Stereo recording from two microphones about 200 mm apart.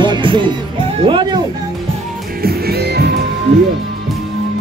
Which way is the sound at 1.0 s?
25° right (ahead or behind).